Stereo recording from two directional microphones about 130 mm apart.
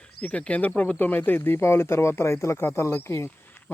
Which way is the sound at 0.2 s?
10° left (ahead or behind).